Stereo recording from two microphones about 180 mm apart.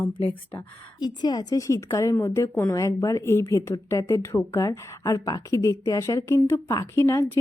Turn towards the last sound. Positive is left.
turn(degrees=15)  # may be behind; listen again after turning